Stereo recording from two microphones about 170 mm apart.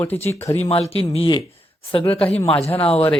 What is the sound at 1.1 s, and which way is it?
Speech, 25° left (ahead or behind).